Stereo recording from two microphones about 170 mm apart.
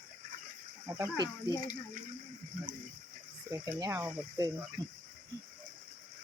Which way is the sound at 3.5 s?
20° right (ahead or behind).